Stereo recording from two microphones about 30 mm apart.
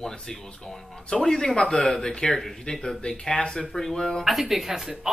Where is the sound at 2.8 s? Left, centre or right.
Left.